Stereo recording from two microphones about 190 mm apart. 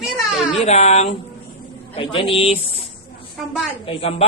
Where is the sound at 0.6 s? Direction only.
35° left (ahead or behind).